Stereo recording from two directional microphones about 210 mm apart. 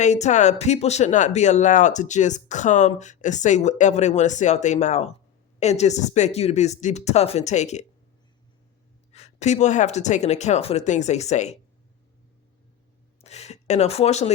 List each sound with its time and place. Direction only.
0.0 s speech: 35° left (ahead or behind)
9.1 s speech: 35° left (ahead or behind)
13.2 s a sound: 30° left (ahead or behind)